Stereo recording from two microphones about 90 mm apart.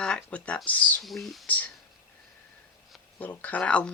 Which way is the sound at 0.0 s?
10° left (ahead or behind).